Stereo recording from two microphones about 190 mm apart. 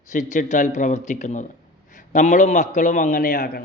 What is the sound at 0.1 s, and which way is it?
A man's voice, 40° left (ahead or behind).